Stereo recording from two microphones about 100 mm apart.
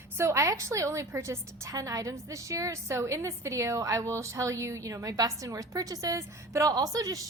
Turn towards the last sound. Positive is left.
turn(degrees=-40)  # may be behind; listen again after turning